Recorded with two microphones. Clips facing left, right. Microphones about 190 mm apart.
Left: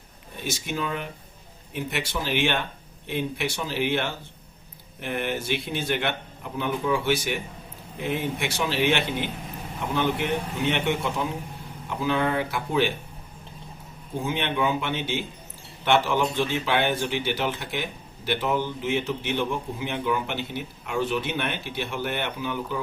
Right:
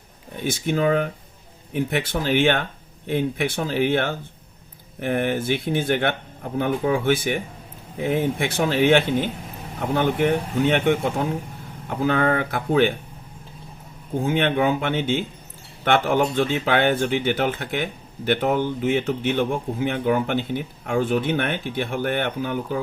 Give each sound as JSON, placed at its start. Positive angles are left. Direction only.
{"t": 0.4, "sound": "speech", "side_deg": -55}
{"t": 14.3, "sound": "speech", "side_deg": -55}